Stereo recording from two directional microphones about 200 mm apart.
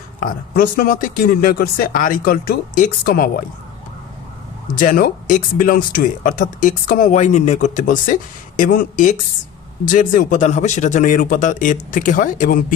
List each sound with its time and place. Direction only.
0.2 s speech: 45° left (ahead or behind)
4.7 s speech: 45° left (ahead or behind)